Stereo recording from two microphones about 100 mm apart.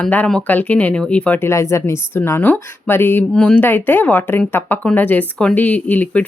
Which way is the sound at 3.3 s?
10° left (ahead or behind).